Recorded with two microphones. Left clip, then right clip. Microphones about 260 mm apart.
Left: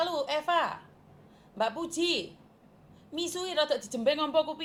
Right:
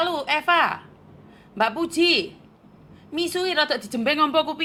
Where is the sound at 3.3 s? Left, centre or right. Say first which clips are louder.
Right 6 dB; right.